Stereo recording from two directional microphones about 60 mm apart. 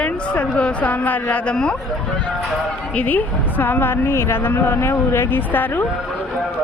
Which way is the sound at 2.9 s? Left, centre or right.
Left.